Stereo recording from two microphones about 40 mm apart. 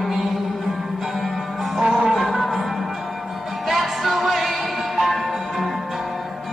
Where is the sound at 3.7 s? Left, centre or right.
Centre.